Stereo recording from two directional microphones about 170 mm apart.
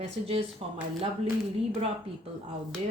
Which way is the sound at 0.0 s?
35° right (ahead or behind).